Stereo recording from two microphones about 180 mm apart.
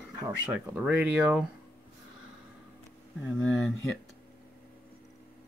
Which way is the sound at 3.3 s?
Centre (ahead or behind).